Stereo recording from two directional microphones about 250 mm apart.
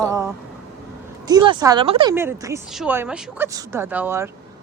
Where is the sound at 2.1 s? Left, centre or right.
Centre.